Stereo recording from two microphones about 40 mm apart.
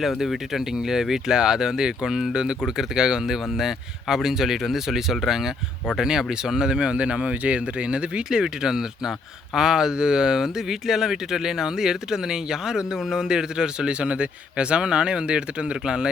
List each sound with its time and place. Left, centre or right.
0.0 s speech: centre; by 15.4 s right